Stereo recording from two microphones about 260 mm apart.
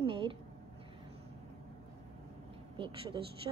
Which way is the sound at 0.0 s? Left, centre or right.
Centre.